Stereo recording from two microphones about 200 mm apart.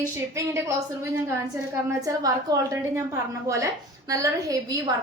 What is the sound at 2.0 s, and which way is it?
A woman's voice, 15° right (ahead or behind).